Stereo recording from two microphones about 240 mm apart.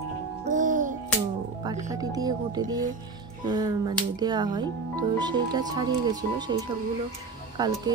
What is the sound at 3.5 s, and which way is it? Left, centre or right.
Speech, centre.